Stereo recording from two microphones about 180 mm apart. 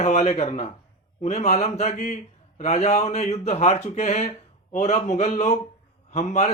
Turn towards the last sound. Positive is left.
turn(degrees=35)  # may be behind; listen again after turning